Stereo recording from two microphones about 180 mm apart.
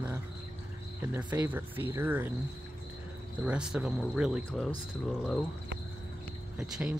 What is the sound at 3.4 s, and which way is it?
Speech, 5° right (ahead or behind).